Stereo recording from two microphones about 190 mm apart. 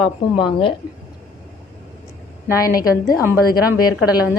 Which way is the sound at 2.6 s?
20° left (ahead or behind).